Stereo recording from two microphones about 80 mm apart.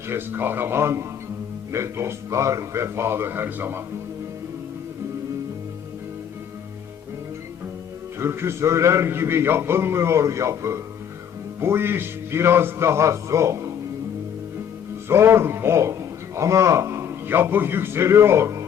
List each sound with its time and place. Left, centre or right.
0.1 s a man's voice: right
8.2 s a man's voice: right
15.1 s a man's voice: right